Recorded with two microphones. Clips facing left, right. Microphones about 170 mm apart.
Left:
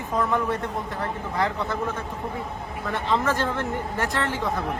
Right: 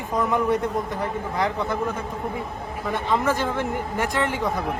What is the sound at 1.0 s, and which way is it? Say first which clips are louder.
Speech: left 2 dB; 15° right (ahead or behind).